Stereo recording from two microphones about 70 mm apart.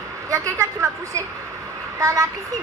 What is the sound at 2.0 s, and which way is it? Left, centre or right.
Speech, right.